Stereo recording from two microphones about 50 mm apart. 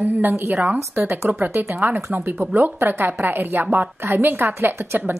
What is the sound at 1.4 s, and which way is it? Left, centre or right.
Speech, right.